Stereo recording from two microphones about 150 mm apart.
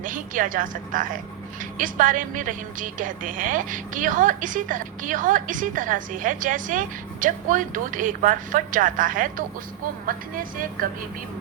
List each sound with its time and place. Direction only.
0.0 s a woman's voice: 60° right (ahead or behind)